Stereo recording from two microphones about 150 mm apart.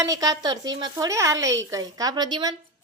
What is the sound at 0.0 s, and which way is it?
Speech, 25° right (ahead or behind).